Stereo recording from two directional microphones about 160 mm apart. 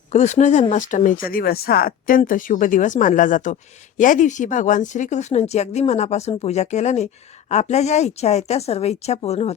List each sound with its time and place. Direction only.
0.1 s speech: 45° left (ahead or behind)